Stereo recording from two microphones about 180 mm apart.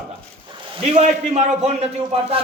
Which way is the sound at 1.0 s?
40° right (ahead or behind).